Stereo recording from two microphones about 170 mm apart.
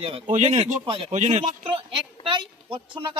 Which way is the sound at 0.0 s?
35° right (ahead or behind).